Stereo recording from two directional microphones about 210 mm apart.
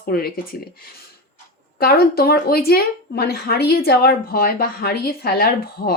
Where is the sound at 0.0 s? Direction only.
45° left (ahead or behind).